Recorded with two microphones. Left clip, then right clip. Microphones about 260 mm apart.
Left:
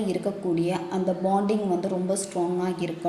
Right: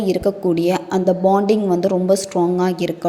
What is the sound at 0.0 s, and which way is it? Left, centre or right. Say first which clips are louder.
A woman's voice: right 10 dB; right.